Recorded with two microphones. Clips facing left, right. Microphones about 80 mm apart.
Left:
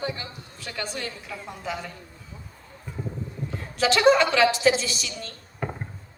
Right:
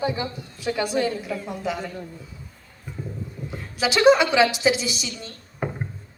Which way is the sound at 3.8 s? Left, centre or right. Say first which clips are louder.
Right 2 dB; centre.